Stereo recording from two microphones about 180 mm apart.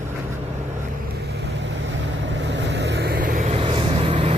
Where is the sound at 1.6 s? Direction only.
85° right.